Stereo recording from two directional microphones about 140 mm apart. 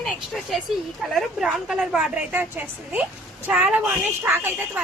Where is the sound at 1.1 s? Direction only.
Centre (ahead or behind).